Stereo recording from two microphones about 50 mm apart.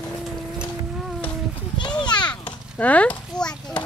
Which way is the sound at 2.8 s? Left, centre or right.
Left.